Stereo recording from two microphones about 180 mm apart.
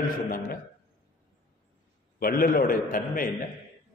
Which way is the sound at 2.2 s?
55° left (ahead or behind).